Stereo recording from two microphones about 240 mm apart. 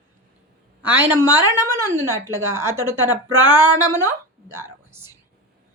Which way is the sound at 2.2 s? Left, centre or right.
Centre.